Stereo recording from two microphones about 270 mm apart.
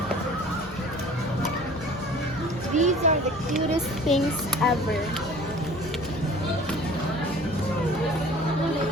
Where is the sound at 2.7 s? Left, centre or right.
Right.